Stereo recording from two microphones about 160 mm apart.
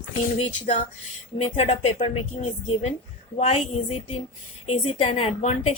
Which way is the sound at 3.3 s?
40° left (ahead or behind).